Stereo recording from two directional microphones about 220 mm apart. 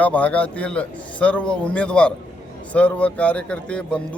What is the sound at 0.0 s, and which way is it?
A man's voice, 5° left (ahead or behind).